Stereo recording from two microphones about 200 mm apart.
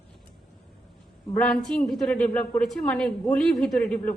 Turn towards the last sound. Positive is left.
turn(degrees=5)  # may be behind; listen again after turning